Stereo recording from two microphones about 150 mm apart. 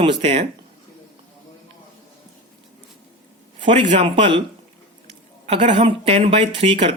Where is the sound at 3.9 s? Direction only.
50° right (ahead or behind).